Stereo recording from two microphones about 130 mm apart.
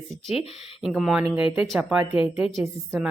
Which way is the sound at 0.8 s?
Centre (ahead or behind).